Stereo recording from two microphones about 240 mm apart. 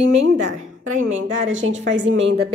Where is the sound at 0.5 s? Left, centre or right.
Right.